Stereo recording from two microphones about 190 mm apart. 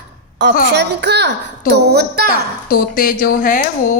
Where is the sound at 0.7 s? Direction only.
65° right (ahead or behind).